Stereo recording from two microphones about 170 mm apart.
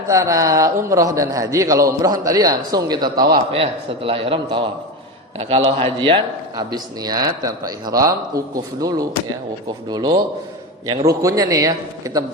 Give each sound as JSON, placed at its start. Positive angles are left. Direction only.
{"t": 0.1, "sound": "a man's voice", "side_deg": -20}
{"t": 3.5, "sound": "a man's voice", "side_deg": -35}